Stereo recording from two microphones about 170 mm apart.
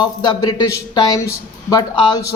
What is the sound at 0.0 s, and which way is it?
A man's voice, 25° left (ahead or behind).